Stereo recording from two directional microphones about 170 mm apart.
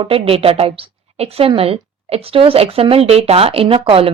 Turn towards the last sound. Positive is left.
turn(degrees=-35)  # may be behind; listen again after turning